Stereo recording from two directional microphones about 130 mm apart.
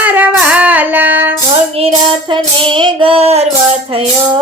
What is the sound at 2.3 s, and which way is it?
Child singing, 40° right (ahead or behind).